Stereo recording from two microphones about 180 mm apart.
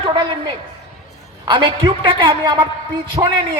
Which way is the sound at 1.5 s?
30° right (ahead or behind).